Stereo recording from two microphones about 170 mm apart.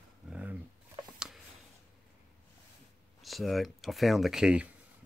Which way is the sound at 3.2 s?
Centre (ahead or behind).